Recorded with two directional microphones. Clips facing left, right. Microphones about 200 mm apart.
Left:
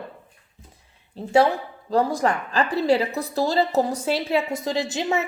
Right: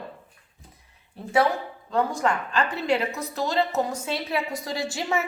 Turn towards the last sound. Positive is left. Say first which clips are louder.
# left 3 dB
turn(degrees=20)  # may be behind; listen again after turning